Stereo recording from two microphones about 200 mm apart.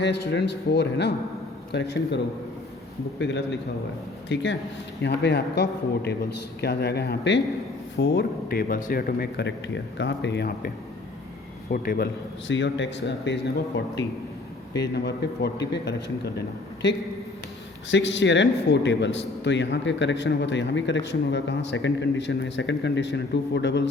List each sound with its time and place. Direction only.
0.0 s a man's voice: 60° left (ahead or behind)
11.7 s speech: 45° left (ahead or behind)
12.5 s a man's voice: 65° left (ahead or behind)
17.9 s a man's voice: 65° left (ahead or behind)